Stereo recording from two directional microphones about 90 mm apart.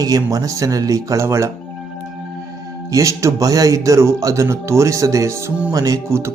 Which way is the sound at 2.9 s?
35° right (ahead or behind).